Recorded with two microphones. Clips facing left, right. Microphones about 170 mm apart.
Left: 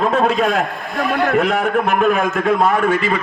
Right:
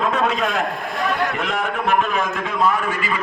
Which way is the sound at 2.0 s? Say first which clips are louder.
Left 6 dB; 55° left (ahead or behind).